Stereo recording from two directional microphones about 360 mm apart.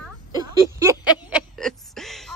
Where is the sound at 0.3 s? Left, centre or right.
Centre.